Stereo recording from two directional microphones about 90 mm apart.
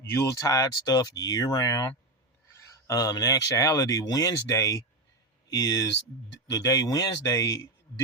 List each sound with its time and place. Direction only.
0.0 s speech: 35° left (ahead or behind)
2.5 s speech: 35° left (ahead or behind)